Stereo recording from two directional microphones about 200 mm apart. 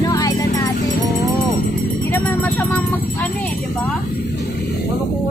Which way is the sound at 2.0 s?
10° left (ahead or behind).